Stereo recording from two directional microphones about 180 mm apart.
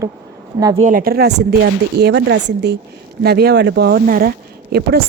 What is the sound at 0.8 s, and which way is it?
Speech, 50° right (ahead or behind).